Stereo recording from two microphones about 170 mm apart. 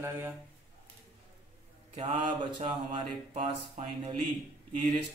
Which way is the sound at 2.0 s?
35° right (ahead or behind).